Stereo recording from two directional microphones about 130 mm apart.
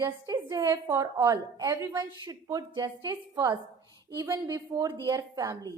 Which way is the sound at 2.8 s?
30° right (ahead or behind).